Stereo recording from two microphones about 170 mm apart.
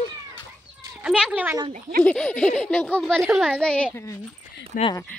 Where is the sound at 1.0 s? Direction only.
5° right (ahead or behind).